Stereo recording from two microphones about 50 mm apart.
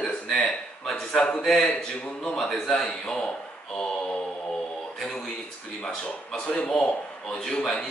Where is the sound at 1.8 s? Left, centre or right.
Centre.